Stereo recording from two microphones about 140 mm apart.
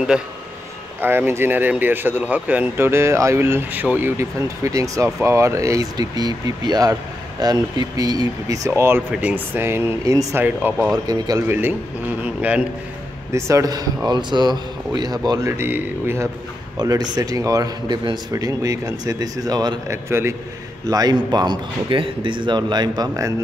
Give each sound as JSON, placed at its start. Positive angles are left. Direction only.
{"t": 0.1, "sound": "speech", "side_deg": -5}
{"t": 11.1, "sound": "speech", "side_deg": -25}
{"t": 11.4, "sound": "speech", "side_deg": -15}
{"t": 13.3, "sound": "speech", "side_deg": -20}
{"t": 16.7, "sound": "speech", "side_deg": -25}
{"t": 20.1, "sound": "speech", "side_deg": -20}
{"t": 20.9, "sound": "speech", "side_deg": -30}